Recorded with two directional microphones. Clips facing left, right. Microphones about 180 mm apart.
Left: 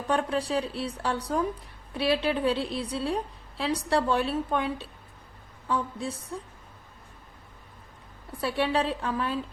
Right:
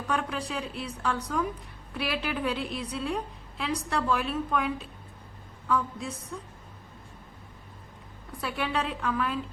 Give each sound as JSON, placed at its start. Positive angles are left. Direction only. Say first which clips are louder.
{"t": 0.1, "sound": "speech", "louder": "left 5 dB", "side_deg": 30}
{"t": 8.4, "sound": "speech", "louder": "left 4 dB", "side_deg": 30}